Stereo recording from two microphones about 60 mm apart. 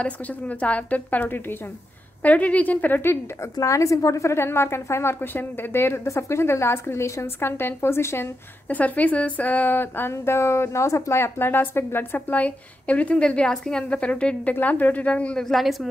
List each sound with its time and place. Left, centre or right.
0.0 s a woman's voice: left
1.2 s speech: left
2.2 s a woman's voice: left
3.5 s a woman's voice: left
6.0 s a woman's voice: left
8.6 s a woman's voice: left
10.1 s a woman's voice: left
12.3 s a woman's voice: left
15.3 s a woman's voice: centre